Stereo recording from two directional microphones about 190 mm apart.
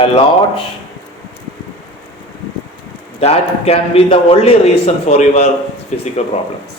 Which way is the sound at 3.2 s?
35° left (ahead or behind).